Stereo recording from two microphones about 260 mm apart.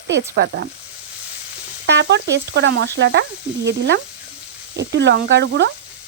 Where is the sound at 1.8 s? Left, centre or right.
Right.